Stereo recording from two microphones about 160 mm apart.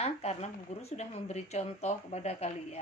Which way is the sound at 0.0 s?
40° left (ahead or behind).